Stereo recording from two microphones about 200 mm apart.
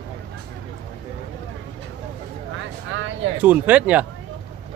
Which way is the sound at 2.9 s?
70° right (ahead or behind).